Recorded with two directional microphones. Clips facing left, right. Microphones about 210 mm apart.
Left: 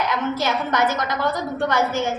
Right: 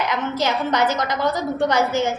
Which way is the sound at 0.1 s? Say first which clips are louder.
Even; 20° right (ahead or behind).